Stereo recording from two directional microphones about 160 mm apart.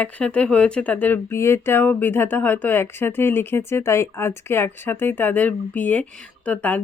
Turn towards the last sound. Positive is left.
turn(degrees=10)  # may be behind; listen again after turning